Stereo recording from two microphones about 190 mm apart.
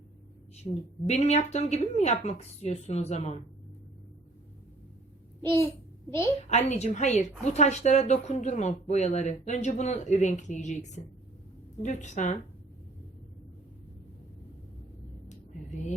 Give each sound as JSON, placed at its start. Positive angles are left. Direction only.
{"t": 0.5, "sound": "a woman's voice", "side_deg": 35}
{"t": 6.1, "sound": "a woman's voice", "side_deg": 15}
{"t": 6.5, "sound": "a woman's voice", "side_deg": 35}